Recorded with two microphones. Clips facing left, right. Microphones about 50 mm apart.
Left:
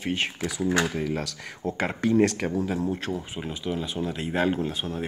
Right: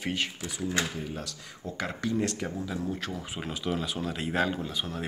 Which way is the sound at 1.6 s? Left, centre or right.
Left.